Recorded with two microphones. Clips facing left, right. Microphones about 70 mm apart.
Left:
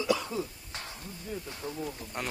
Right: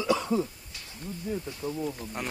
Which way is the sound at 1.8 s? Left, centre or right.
Centre.